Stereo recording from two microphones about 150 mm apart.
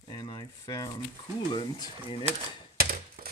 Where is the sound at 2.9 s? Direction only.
80° right.